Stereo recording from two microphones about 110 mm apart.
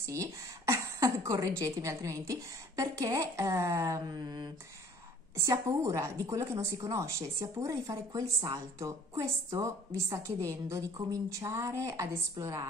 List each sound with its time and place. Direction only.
0.0 s a woman's voice: 30° right (ahead or behind)
5.5 s a woman's voice: 30° right (ahead or behind)